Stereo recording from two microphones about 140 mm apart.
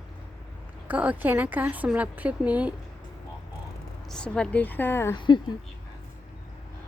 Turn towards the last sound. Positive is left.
turn(degrees=35)  # may be behind; listen again after turning